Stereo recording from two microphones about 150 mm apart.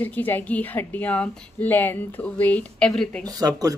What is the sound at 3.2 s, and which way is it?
Speech, 25° right (ahead or behind).